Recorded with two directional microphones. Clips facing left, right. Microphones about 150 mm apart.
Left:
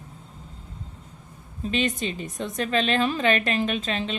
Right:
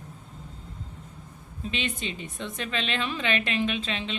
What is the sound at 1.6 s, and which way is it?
A woman's voice, 40° left (ahead or behind).